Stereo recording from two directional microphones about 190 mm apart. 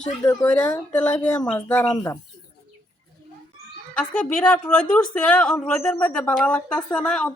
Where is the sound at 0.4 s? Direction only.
5° left (ahead or behind).